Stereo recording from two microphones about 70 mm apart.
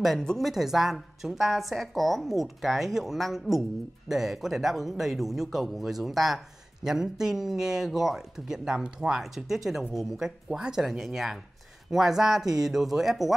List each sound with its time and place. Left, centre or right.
0.0 s a man's voice: centre